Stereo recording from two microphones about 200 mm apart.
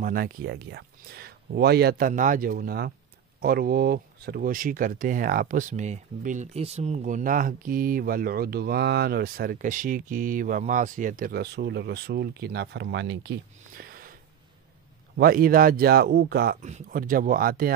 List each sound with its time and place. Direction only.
0.0 s speech: 45° right (ahead or behind)
15.1 s speech: 50° right (ahead or behind)
16.6 s speech: 40° right (ahead or behind)